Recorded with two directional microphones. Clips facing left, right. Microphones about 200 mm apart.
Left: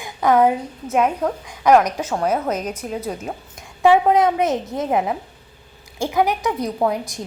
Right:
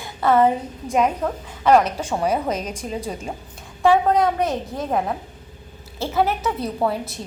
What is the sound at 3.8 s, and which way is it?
A woman's voice, 20° left (ahead or behind).